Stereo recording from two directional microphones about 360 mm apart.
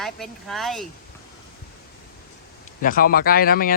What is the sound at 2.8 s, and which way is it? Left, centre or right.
Speech, left.